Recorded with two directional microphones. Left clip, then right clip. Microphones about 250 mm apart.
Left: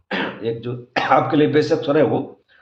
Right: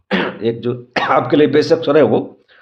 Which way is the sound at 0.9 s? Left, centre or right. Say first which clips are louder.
Right 2 dB; right.